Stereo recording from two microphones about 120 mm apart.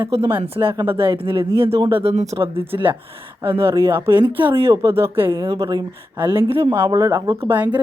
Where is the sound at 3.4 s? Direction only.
20° right (ahead or behind).